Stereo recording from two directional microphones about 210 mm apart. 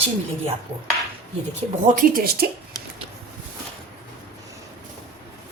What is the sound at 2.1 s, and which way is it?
Speech, 45° right (ahead or behind).